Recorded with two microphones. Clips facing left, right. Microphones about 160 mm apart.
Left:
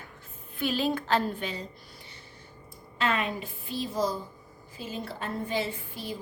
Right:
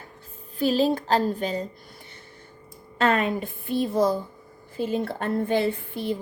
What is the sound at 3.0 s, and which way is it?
A woman's voice, 50° right (ahead or behind).